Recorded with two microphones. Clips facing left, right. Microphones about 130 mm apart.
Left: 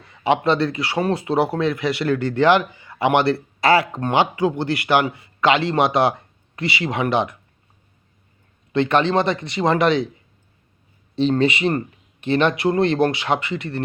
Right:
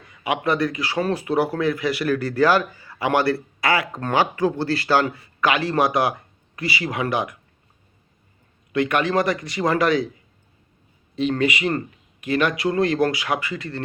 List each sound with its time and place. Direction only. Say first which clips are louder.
0.0 s speech: left 5 dB; 30° left (ahead or behind)
8.7 s speech: left 3 dB; 30° left (ahead or behind)
11.1 s speech: left 3 dB; 30° left (ahead or behind)